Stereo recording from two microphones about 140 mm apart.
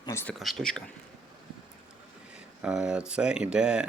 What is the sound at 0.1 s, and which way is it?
Speech, 15° left (ahead or behind).